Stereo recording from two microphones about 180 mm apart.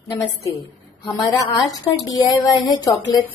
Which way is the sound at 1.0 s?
20° left (ahead or behind).